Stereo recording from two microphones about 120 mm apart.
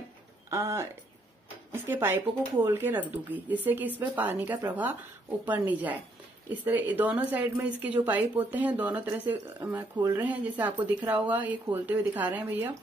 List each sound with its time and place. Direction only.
0.5 s a woman's voice: 25° right (ahead or behind)